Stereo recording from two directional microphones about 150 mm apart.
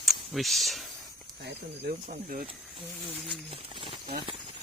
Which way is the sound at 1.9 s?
70° right (ahead or behind).